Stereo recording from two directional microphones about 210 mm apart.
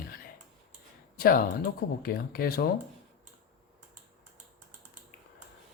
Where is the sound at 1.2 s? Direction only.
45° left (ahead or behind).